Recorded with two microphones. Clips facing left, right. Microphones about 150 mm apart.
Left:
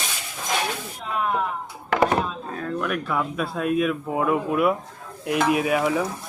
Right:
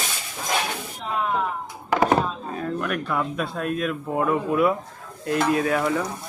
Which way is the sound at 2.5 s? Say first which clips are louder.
Even; 5° right (ahead or behind).